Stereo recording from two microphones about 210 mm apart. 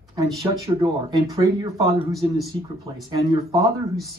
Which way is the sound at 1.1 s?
15° right (ahead or behind).